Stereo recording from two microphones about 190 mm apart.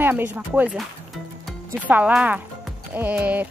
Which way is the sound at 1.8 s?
10° right (ahead or behind).